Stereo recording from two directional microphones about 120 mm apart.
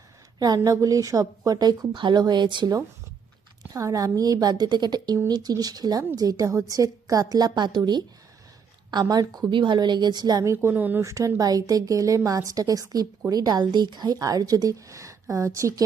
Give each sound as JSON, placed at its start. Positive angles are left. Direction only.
{"t": 0.3, "sound": "a woman's voice", "side_deg": -35}
{"t": 3.7, "sound": "a woman's voice", "side_deg": -30}
{"t": 8.9, "sound": "a woman's voice", "side_deg": -35}